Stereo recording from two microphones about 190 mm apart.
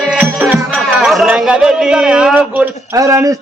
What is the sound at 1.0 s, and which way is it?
A man's voice, centre (ahead or behind).